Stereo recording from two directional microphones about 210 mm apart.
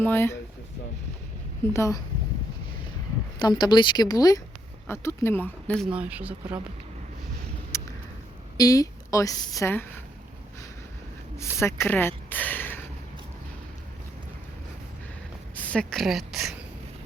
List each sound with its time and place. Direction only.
0.0 s a woman's voice: 10° left (ahead or behind)
1.7 s a woman's voice: 15° left (ahead or behind)
3.3 s a woman's voice: 20° left (ahead or behind)
5.9 s speech: 5° right (ahead or behind)
7.7 s a sound: 15° left (ahead or behind)
8.5 s a woman's voice: 15° left (ahead or behind)
11.3 s speech: 10° left (ahead or behind)
15.5 s a woman's voice: 5° left (ahead or behind)